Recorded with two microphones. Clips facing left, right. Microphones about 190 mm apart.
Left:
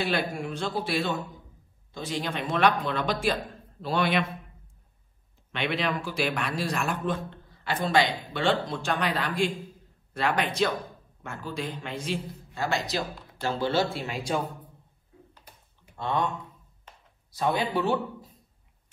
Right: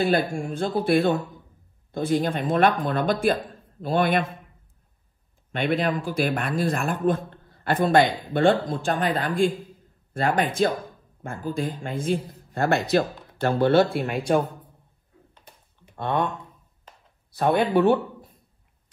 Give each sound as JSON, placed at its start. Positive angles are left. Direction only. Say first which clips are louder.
{"t": 0.0, "sound": "a man's voice", "louder": "right 6 dB", "side_deg": -50}
{"t": 5.5, "sound": "a man's voice", "louder": "right 5 dB", "side_deg": -50}
{"t": 15.3, "sound": "typing", "louder": "right 2 dB", "side_deg": -25}
{"t": 16.0, "sound": "a man's voice", "louder": "right 3 dB", "side_deg": -55}
{"t": 17.3, "sound": "speech", "louder": "right 6 dB", "side_deg": -60}